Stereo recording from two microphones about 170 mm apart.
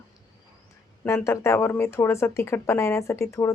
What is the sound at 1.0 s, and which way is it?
Speech, 15° left (ahead or behind).